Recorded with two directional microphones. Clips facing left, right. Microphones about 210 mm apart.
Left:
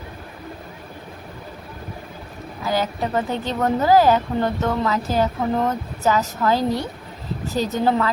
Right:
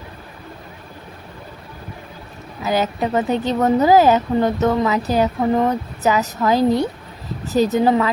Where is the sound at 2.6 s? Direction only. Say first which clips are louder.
Right 3 dB; 20° right (ahead or behind).